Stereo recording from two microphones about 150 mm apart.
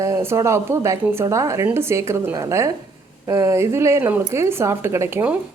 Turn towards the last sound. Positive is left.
turn(degrees=-10)  # may be behind; listen again after turning